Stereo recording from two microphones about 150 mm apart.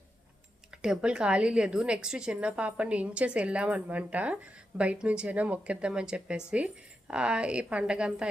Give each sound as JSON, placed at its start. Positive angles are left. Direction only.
{"t": 0.7, "sound": "a woman's voice", "side_deg": -5}